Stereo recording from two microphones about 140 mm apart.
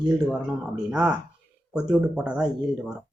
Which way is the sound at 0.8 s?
5° right (ahead or behind).